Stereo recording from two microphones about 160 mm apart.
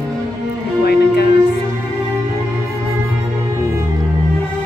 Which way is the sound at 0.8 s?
85° left.